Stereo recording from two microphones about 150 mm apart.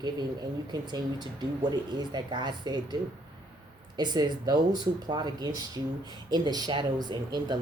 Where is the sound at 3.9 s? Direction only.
30° right (ahead or behind).